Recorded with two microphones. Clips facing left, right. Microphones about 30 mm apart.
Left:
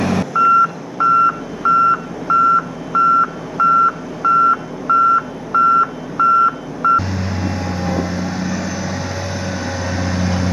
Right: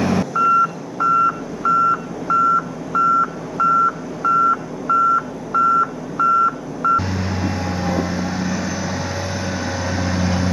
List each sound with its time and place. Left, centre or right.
0.0 s reversing beeps: centre
0.4 s reversing beeps: left
7.0 s vehicle: centre